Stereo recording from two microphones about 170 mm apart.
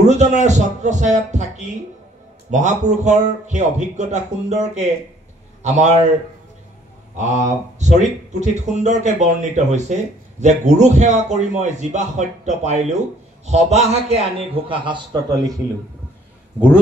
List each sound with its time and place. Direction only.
0.0 s speech: 45° right (ahead or behind)
5.6 s a man's voice: 45° right (ahead or behind)
7.2 s a man's voice: 45° right (ahead or behind); by 15.5 s 25° right (ahead or behind)